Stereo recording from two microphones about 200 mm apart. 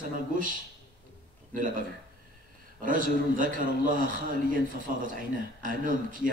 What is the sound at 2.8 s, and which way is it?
Speech, 40° right (ahead or behind).